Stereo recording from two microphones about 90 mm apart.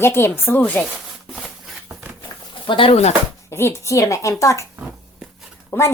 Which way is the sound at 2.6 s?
70° left (ahead or behind).